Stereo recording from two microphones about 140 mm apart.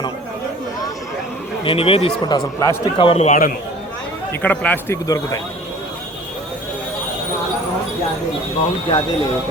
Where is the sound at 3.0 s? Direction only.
45° left (ahead or behind).